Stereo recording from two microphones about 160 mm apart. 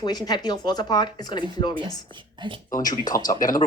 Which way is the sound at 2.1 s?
30° right (ahead or behind).